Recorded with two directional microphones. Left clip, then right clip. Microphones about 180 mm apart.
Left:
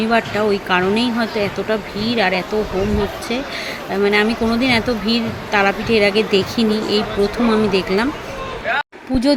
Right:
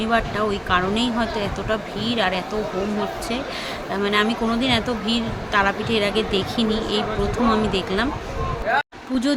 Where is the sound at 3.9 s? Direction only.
15° left (ahead or behind).